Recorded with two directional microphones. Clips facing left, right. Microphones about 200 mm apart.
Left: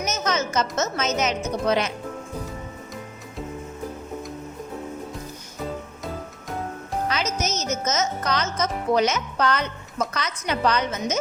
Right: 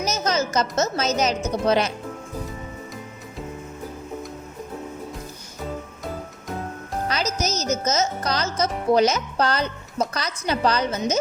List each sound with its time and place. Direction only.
0.0 s music: 35° right (ahead or behind)
1.6 s speech: 35° right (ahead or behind)
7.1 s music: 35° right (ahead or behind)